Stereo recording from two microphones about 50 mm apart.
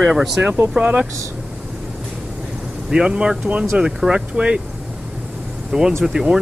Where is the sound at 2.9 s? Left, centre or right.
Centre.